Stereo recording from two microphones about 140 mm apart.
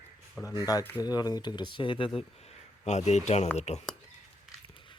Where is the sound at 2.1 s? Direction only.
50° left (ahead or behind).